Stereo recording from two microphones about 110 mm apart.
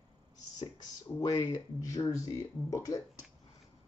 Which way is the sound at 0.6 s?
35° left (ahead or behind).